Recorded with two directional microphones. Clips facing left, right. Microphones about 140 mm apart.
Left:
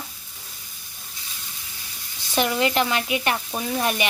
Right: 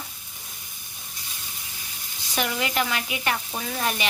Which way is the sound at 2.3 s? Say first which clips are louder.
Left 5 dB; 30° left (ahead or behind).